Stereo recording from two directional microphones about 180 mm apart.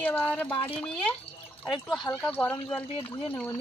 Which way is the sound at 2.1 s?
10° left (ahead or behind).